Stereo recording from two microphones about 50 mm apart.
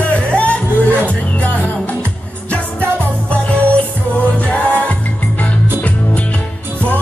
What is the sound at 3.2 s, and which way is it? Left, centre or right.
Music, left.